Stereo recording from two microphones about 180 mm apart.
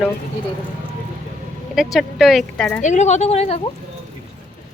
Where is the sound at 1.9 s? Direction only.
Centre (ahead or behind).